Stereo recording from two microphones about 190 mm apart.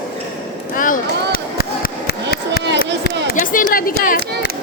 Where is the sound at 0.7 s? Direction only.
45° left (ahead or behind).